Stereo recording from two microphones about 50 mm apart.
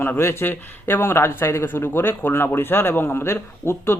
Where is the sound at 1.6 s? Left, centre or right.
Left.